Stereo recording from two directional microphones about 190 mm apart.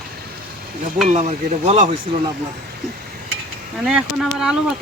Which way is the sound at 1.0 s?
35° right (ahead or behind).